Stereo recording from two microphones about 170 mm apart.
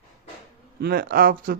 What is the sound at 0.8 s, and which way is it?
Speech, 60° right (ahead or behind).